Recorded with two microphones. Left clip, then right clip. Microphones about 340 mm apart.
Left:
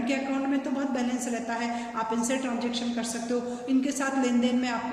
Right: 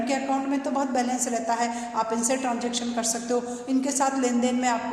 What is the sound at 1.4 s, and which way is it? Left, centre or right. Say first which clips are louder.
Speech: right 8 dB; centre.